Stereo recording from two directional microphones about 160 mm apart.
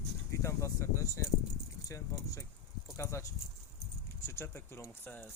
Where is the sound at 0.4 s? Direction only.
20° left (ahead or behind).